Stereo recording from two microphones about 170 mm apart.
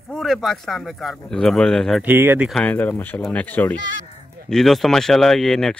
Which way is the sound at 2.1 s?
10° right (ahead or behind).